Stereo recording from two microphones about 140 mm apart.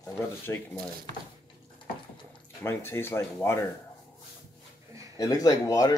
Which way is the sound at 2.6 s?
15° left (ahead or behind).